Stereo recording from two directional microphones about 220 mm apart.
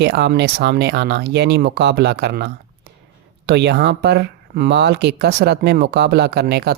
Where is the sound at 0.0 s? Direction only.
50° right (ahead or behind).